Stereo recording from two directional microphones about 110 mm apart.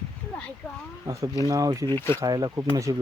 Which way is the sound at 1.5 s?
30° right (ahead or behind).